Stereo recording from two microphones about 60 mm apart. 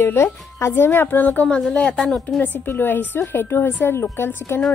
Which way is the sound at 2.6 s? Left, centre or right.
Left.